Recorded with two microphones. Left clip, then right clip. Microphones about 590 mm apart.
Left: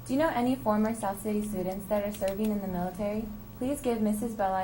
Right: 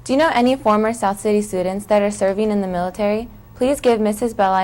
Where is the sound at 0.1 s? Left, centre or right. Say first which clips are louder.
Right 12 dB; right.